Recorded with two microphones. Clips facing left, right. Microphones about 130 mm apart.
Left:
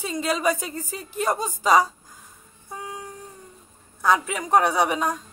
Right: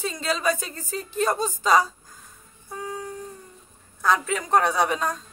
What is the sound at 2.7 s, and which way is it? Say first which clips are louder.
Music: right 2 dB; 15° left (ahead or behind).